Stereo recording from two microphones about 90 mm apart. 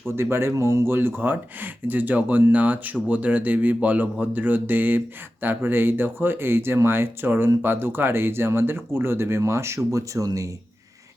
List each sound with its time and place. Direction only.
0.2 s a man's voice: 25° right (ahead or behind)